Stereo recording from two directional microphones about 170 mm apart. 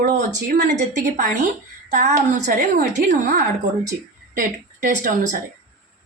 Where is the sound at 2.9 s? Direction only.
70° right (ahead or behind).